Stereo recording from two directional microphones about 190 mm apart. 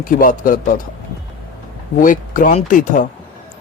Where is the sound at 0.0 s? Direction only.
45° left (ahead or behind).